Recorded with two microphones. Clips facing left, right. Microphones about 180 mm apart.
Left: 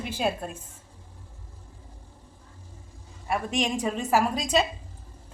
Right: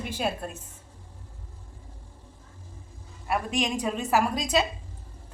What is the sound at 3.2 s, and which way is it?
A woman's voice, centre (ahead or behind).